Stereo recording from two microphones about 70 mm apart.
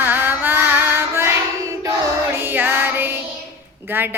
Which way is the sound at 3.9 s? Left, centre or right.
Right.